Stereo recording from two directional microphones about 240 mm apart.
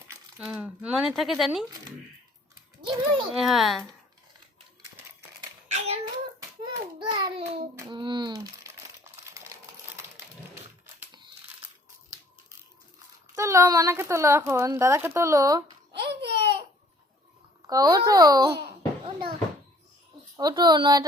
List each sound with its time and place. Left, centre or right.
0.1 s speech: centre
2.8 s a child's voice: centre
3.3 s a child's voice: centre
4.8 s crumpling: centre
5.7 s child singing: right
7.0 s a sound: right
7.9 s speech: centre
10.0 s a sound: centre
13.3 s a woman's voice: centre
15.9 s a sound: right
17.7 s a woman's voice: centre
20.3 s a woman's voice: centre